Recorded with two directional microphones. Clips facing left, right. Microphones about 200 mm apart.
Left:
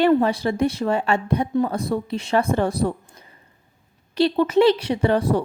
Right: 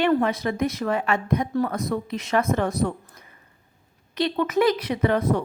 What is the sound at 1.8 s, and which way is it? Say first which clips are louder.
Speech: left 2 dB; 30° left (ahead or behind).